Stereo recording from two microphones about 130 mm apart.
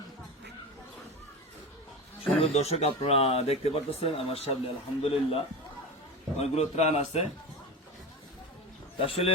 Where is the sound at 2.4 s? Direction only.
55° left (ahead or behind).